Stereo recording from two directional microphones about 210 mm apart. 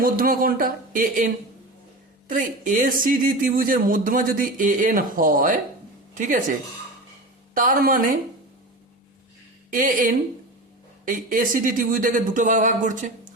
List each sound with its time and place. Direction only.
0.0 s speech: 45° right (ahead or behind)
2.3 s a man's voice: 40° right (ahead or behind)
7.5 s a man's voice: 40° right (ahead or behind)
9.6 s a man's voice: 40° right (ahead or behind)